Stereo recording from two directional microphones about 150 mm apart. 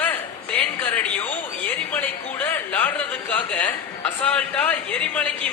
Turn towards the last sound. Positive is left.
turn(degrees=10)  # may be behind; listen again after turning